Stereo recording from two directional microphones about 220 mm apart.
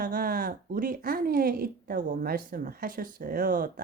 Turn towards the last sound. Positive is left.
turn(degrees=-40)  # may be behind; listen again after turning